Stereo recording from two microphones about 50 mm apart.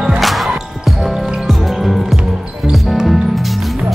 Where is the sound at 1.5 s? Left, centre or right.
Centre.